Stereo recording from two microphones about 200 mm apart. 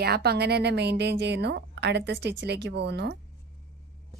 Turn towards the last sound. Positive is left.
turn(degrees=-60)  # may be behind; listen again after turning